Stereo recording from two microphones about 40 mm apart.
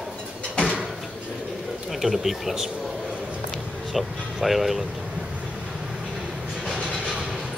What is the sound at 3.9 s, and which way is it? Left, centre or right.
Speech, centre.